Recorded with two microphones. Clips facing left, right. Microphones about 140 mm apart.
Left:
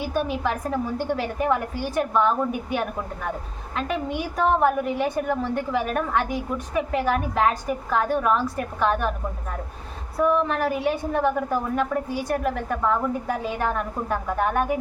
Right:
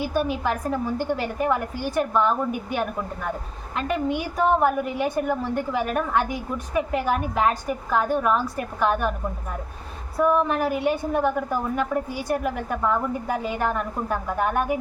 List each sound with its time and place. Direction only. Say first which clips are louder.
0.0 s a woman's voice: right 1 dB; 5° right (ahead or behind)
10.2 s a woman's voice: right 1 dB; 5° right (ahead or behind)